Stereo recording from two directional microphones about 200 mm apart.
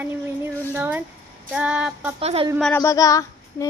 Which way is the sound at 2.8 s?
15° left (ahead or behind).